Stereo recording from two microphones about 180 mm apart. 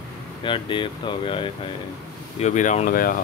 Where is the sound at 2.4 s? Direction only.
40° left (ahead or behind).